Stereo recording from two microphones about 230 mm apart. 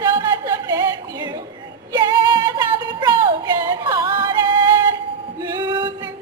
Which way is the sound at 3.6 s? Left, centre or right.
Centre.